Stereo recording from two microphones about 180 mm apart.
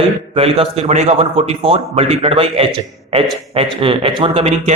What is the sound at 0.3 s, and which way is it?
A man's voice, 35° right (ahead or behind).